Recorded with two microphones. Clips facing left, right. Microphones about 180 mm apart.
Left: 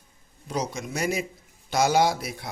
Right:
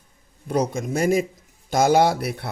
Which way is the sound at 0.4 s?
55° right (ahead or behind).